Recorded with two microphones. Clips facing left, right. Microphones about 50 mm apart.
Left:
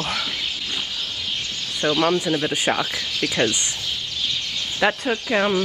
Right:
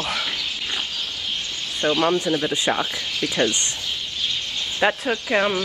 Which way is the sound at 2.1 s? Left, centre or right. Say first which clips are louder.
Even; left.